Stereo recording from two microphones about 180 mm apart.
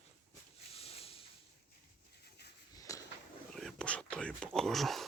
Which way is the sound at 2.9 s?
15° left (ahead or behind).